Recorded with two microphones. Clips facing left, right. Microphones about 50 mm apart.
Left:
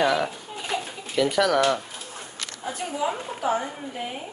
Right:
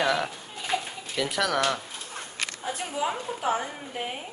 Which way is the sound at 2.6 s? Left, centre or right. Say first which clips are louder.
Left 3 dB; centre.